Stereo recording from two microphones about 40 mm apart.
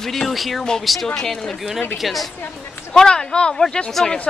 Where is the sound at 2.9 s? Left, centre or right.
Centre.